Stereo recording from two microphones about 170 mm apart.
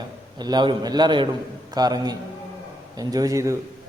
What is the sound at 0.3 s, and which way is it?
A man's voice, 25° right (ahead or behind).